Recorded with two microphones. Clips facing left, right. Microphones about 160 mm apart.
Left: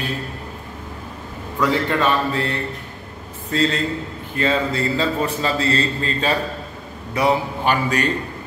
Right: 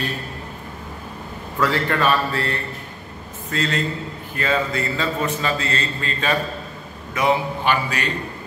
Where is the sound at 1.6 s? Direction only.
20° left (ahead or behind).